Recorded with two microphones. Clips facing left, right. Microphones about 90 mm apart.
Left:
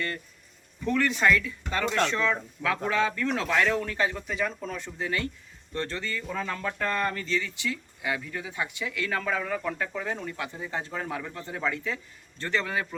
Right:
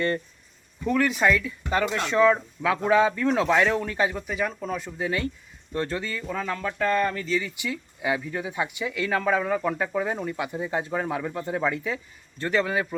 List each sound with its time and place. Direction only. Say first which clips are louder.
0.9 s speech: right 2 dB; 10° right (ahead or behind)